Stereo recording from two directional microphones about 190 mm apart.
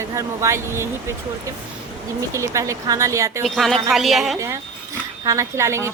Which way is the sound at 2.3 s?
15° right (ahead or behind).